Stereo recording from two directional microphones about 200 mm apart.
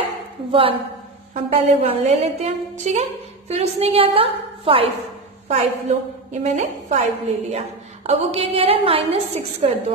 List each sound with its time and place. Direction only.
0.5 s a woman's voice: 25° right (ahead or behind)